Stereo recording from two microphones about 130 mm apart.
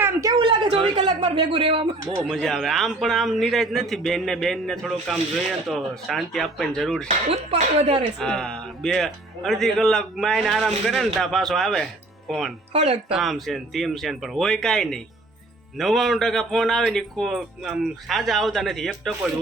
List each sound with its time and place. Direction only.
0.0 s a sound: 25° right (ahead or behind)
0.3 s speech: 40° right (ahead or behind)
2.2 s speech: centre (ahead or behind)
7.3 s speech: 50° right (ahead or behind)
8.2 s speech: 5° left (ahead or behind)
12.7 s speech: 55° right (ahead or behind)
13.1 s speech: centre (ahead or behind)